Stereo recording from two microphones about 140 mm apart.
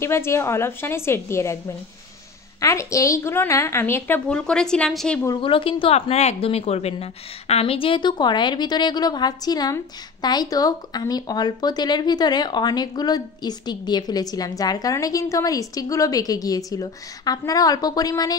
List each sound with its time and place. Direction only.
0.0 s speech: 20° left (ahead or behind)
2.6 s a woman's voice: 20° left (ahead or behind); by 5.2 s 5° left (ahead or behind)
5.4 s a woman's voice: 40° left (ahead or behind)